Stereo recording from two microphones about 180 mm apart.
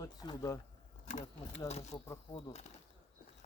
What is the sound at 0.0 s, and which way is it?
Speech, 20° left (ahead or behind).